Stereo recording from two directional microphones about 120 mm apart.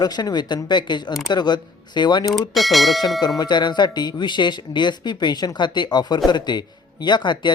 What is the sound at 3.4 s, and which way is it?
Speech, 40° left (ahead or behind).